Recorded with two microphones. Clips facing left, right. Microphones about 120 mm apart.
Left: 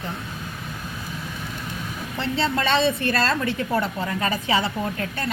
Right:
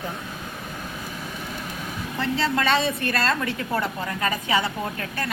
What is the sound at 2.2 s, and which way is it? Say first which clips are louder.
A woman's voice: even; 30° left (ahead or behind).